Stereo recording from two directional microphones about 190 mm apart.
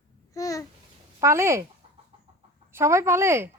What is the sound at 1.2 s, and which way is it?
Speech, 15° right (ahead or behind).